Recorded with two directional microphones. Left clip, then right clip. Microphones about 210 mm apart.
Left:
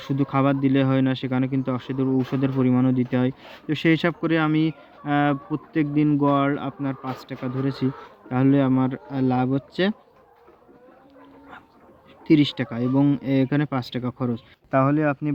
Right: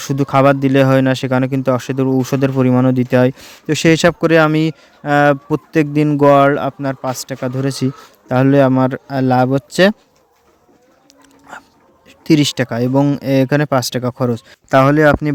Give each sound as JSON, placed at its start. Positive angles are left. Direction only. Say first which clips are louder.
{"t": 0.0, "sound": "speech", "louder": "right 10 dB", "side_deg": -50}
{"t": 12.2, "sound": "speech", "louder": "right 6 dB", "side_deg": -55}
{"t": 14.7, "sound": "speech", "louder": "right 11 dB", "side_deg": -40}